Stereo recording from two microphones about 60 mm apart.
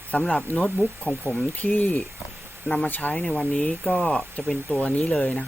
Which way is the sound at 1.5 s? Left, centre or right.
Left.